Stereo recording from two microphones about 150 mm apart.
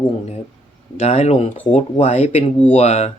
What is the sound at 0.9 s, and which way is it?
Speech, 50° left (ahead or behind).